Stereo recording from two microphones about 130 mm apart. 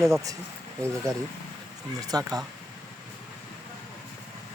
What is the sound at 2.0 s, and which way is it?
Speech, 30° right (ahead or behind).